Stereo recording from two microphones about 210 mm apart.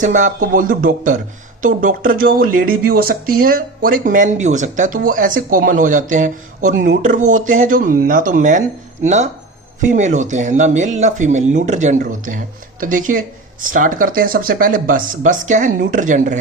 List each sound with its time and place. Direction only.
0.0 s speech: 35° right (ahead or behind)